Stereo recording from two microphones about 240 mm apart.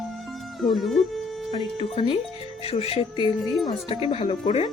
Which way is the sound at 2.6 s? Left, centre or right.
Left.